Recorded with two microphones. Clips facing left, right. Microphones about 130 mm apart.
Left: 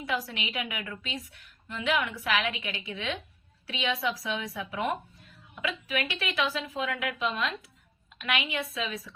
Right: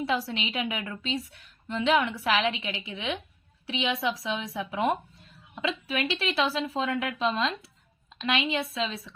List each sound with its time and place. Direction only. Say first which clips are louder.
0.0 s a woman's voice: right 4 dB; 25° right (ahead or behind)